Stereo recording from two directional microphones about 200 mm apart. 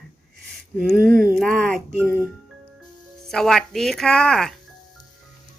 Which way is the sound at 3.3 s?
5° left (ahead or behind).